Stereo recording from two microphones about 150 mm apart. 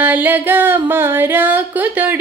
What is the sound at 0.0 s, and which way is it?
Female singing, 10° right (ahead or behind).